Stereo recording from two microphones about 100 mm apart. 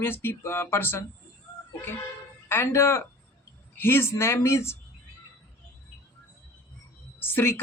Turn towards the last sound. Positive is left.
turn(degrees=25)  # may be behind; listen again after turning